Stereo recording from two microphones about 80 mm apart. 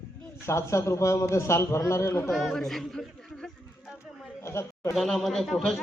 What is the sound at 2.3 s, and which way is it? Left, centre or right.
A man's voice, centre.